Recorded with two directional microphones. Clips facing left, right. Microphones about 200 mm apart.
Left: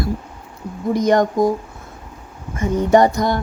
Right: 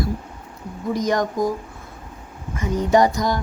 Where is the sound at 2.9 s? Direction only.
55° left (ahead or behind).